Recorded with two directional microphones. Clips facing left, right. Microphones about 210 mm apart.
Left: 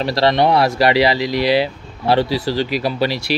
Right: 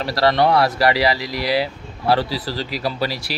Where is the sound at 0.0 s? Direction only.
20° left (ahead or behind).